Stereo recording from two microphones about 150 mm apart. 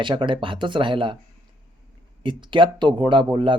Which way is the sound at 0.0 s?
35° right (ahead or behind).